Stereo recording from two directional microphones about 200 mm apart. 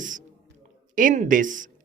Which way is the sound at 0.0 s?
40° right (ahead or behind).